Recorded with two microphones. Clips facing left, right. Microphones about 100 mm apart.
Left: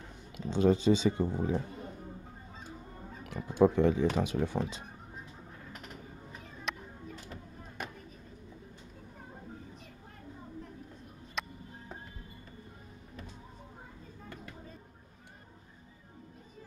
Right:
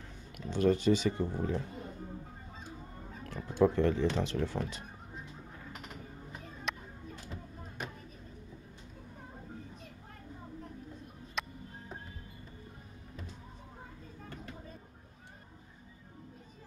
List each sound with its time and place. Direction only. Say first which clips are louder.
0.4 s speech: left 2 dB; 20° left (ahead or behind)
3.3 s speech: left 2 dB; 10° left (ahead or behind)
6.7 s music: even; centre (ahead or behind)
11.4 s music: even; centre (ahead or behind)